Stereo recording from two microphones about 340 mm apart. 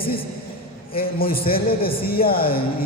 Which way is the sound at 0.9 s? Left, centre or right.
Left.